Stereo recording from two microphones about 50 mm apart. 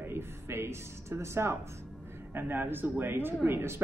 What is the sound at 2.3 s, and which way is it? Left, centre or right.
Speech, right.